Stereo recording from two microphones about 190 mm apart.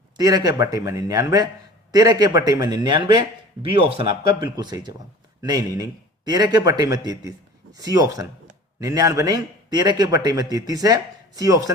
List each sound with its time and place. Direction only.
0.2 s a man's voice: 20° right (ahead or behind)